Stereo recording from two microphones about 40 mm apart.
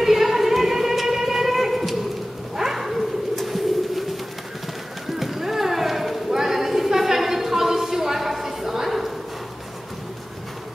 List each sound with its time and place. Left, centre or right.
0.0 s music: centre
2.5 s bird: centre
3.3 s vehicle: centre
5.0 s clip-clop: centre